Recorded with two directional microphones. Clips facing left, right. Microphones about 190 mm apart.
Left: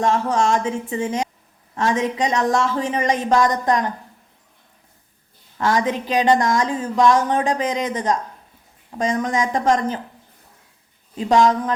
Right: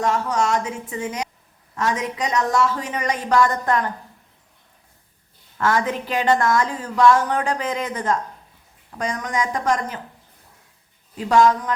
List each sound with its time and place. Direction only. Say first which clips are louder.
0.0 s speech: left 2 dB; 30° left (ahead or behind)
5.5 s speech: left 1 dB; 20° left (ahead or behind)
11.2 s speech: left 1 dB; 20° left (ahead or behind)